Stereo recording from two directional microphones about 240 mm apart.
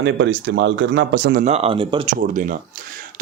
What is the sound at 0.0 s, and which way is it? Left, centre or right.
Speech, right.